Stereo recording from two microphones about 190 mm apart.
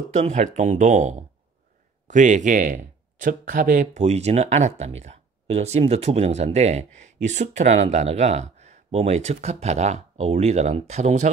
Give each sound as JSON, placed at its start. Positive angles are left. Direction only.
{"t": 0.1, "sound": "speech", "side_deg": -35}